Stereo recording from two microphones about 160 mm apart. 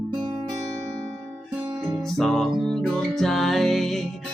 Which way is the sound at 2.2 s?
Centre (ahead or behind).